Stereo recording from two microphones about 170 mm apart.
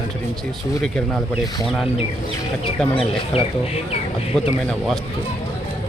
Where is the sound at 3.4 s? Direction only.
35° left (ahead or behind).